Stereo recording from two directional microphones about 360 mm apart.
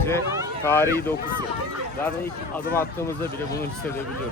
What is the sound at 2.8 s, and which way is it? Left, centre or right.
Speech, centre.